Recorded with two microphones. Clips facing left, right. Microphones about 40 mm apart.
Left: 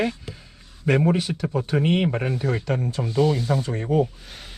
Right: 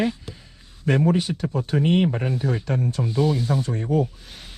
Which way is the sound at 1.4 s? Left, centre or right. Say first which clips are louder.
Left 2 dB; left.